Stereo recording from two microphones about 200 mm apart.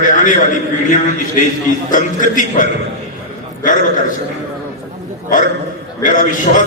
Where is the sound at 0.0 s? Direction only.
40° left (ahead or behind).